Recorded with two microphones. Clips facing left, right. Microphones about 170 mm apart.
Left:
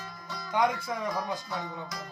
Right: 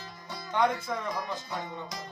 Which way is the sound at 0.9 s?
10° left (ahead or behind).